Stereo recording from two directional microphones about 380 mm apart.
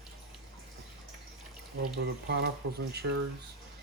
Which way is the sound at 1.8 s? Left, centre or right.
Right.